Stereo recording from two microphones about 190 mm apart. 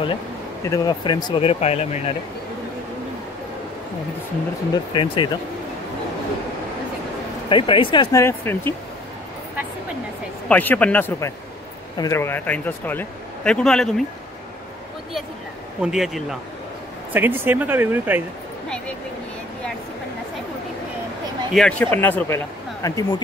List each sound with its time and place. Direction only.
0.7 s speech: 20° left (ahead or behind)
4.7 s speech: 25° left (ahead or behind)
7.4 s speech: 25° left (ahead or behind)
10.5 s speech: 10° left (ahead or behind)
15.8 s speech: centre (ahead or behind)
21.5 s speech: 5° left (ahead or behind)